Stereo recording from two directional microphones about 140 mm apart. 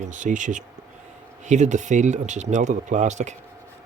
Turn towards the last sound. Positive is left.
turn(degrees=-55)  # may be behind; listen again after turning